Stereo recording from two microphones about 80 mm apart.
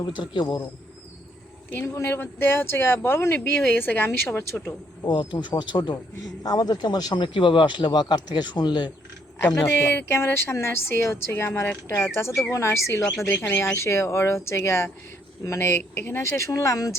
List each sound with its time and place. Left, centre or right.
0.4 s speech: left
1.9 s speech: left
5.0 s speech: left
6.4 s speech: left
9.6 s a woman's voice: left
13.1 s speech: centre
13.6 s a woman's voice: left